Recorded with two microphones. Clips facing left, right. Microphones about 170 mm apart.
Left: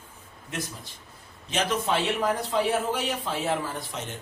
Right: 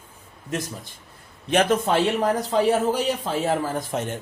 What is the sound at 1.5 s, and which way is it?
A man's voice, 50° right (ahead or behind).